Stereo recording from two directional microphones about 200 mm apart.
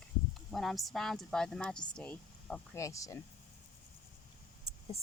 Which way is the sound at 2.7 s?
15° left (ahead or behind).